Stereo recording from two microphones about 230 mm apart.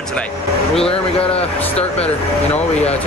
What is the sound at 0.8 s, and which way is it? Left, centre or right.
Speech, left.